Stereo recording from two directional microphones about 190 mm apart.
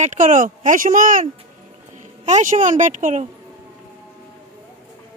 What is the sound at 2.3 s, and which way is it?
Speech, 40° right (ahead or behind).